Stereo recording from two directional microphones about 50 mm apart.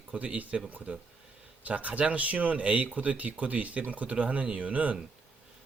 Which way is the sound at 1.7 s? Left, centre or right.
Right.